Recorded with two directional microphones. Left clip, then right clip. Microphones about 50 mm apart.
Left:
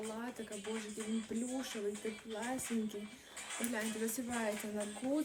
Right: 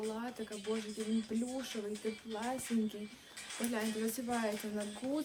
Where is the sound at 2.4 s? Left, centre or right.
Right.